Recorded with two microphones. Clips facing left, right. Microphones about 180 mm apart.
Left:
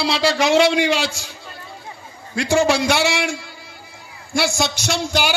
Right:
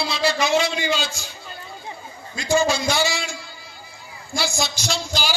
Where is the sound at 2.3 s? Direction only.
75° left (ahead or behind).